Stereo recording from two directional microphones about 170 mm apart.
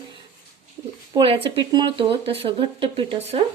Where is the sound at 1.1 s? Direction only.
35° right (ahead or behind).